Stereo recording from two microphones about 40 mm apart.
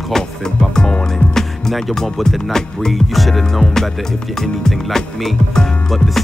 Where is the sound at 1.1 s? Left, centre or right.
Centre.